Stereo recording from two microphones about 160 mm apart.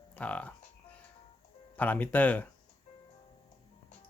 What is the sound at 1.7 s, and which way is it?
Speech, 10° left (ahead or behind).